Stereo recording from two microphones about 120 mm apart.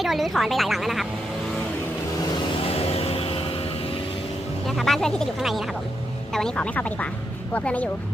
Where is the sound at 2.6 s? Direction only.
55° left (ahead or behind).